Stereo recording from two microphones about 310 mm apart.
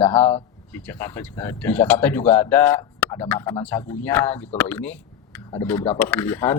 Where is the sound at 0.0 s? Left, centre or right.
Centre.